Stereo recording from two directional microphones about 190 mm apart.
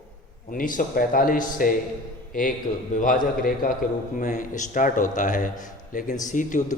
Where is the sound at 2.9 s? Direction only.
40° left (ahead or behind).